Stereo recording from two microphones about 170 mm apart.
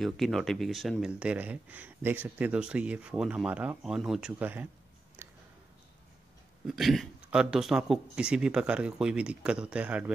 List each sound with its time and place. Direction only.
0.0 s speech: centre (ahead or behind)
5.2 s music: 10° right (ahead or behind)
6.7 s speech: centre (ahead or behind)